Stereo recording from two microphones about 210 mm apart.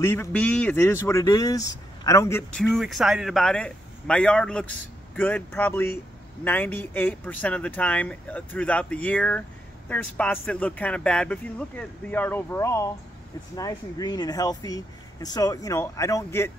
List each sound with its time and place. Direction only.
0.0 s speech: 10° left (ahead or behind)